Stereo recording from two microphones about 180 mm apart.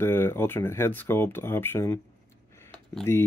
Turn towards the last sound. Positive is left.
turn(degrees=15)  # may be behind; listen again after turning